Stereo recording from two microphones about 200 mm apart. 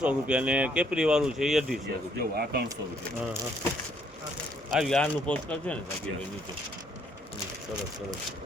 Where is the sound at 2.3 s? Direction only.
50° right (ahead or behind).